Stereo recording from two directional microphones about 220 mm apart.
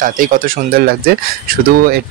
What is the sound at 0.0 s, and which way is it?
Speech, 40° right (ahead or behind).